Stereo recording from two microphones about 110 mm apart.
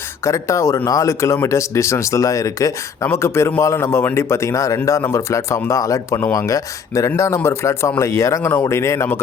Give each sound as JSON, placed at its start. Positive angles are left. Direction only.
{"t": 0.3, "sound": "speech", "side_deg": 30}